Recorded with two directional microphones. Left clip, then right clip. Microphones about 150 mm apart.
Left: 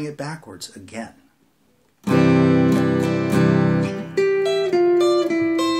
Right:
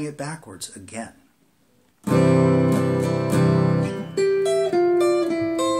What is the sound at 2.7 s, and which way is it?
Music, 25° left (ahead or behind).